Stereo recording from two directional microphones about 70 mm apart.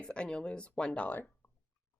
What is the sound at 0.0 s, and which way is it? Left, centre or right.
Speech, centre.